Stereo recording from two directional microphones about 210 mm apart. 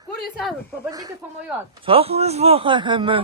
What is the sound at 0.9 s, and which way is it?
A man's voice, 20° right (ahead or behind).